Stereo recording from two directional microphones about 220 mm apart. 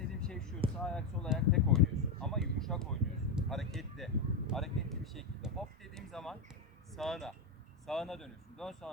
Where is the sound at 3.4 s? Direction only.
Centre (ahead or behind).